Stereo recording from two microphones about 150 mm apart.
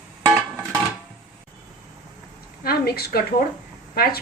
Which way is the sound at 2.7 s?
90° left.